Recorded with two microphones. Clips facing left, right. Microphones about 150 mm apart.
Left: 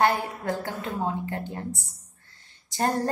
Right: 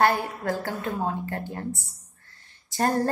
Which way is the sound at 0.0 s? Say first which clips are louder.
Right 1 dB; 20° left (ahead or behind).